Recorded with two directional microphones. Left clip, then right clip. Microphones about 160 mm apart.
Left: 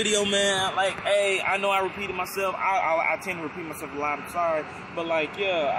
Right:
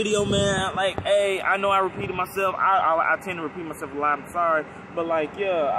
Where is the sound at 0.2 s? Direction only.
10° right (ahead or behind).